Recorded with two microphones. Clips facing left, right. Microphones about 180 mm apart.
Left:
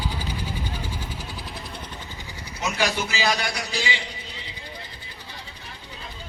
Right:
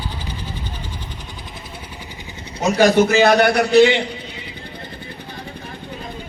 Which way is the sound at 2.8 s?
50° right (ahead or behind).